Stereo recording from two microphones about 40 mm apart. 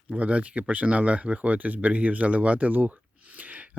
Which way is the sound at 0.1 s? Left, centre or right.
Right.